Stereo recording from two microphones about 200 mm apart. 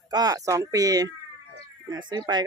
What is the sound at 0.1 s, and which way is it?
Speech, 20° right (ahead or behind).